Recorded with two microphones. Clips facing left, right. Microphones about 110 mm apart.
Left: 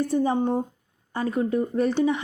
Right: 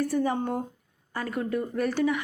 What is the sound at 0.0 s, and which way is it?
A woman's voice, 25° left (ahead or behind).